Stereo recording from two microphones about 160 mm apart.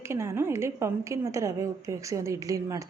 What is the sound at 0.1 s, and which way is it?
A woman's voice, 15° right (ahead or behind).